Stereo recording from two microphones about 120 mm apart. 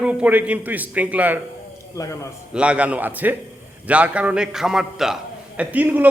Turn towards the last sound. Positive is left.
turn(degrees=-15)  # may be behind; listen again after turning